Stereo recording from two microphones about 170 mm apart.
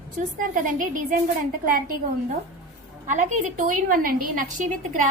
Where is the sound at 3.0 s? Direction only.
45° right (ahead or behind).